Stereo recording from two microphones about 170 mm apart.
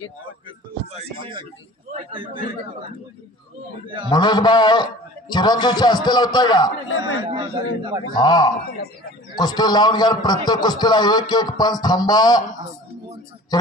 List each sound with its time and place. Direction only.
0.9 s a man's voice: 30° right (ahead or behind)
4.1 s a man's voice: 25° left (ahead or behind)
7.0 s a man's voice: 25° right (ahead or behind)
8.1 s a man's voice: 25° left (ahead or behind)
13.5 s a man's voice: 25° left (ahead or behind)